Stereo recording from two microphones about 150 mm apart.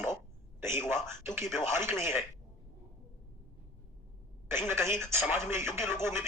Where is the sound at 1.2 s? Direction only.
15° right (ahead or behind).